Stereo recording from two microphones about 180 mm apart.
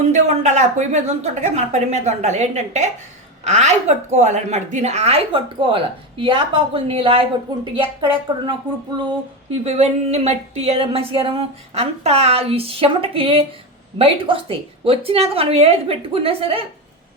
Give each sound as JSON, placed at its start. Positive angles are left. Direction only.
{"t": 0.0, "sound": "a woman's voice", "side_deg": -40}
{"t": 9.0, "sound": "a woman's voice", "side_deg": -35}